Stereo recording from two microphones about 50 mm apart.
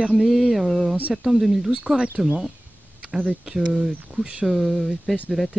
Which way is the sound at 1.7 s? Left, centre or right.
Centre.